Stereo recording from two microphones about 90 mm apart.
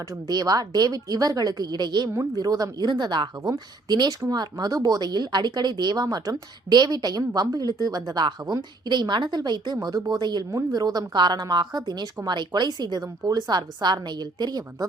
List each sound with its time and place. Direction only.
0.3 s a woman's voice: 45° right (ahead or behind)